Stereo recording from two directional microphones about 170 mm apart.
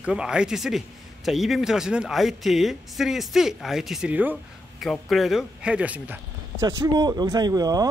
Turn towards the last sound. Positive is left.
turn(degrees=-20)  # may be behind; listen again after turning